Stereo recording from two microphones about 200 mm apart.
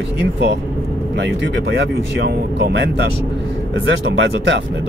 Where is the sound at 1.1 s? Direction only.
60° right (ahead or behind).